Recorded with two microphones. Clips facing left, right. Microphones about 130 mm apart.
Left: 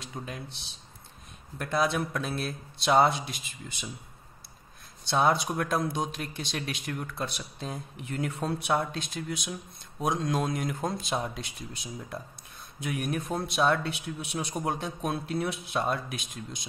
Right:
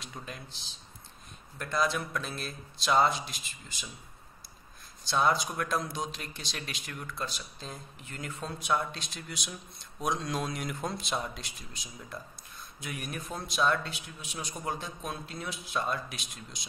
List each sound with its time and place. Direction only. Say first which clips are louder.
0.2 s speech: left 5 dB; 45° left (ahead or behind)
1.6 s speech: left 3 dB; 60° left (ahead or behind)
5.0 s speech: left 3 dB; 55° left (ahead or behind)
11.8 s speech: left 4 dB; 55° left (ahead or behind)